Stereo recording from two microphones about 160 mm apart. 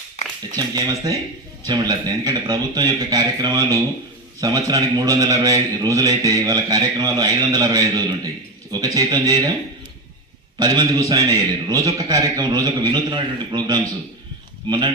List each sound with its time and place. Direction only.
0.5 s a man's voice: 25° right (ahead or behind)
10.6 s a man's voice: 25° right (ahead or behind)